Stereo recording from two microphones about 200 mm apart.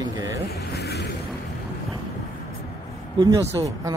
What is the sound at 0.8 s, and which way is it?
Vehicle, 55° left (ahead or behind).